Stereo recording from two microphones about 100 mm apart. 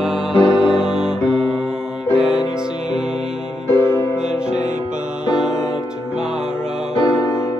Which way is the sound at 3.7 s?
25° left (ahead or behind).